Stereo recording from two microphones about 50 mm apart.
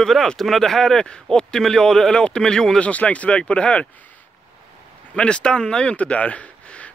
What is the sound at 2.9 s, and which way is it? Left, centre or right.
Speech, left.